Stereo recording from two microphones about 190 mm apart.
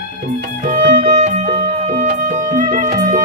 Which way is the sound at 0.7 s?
40° right (ahead or behind).